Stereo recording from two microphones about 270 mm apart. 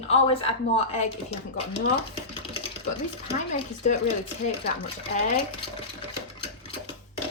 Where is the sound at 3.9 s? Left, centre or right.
Left.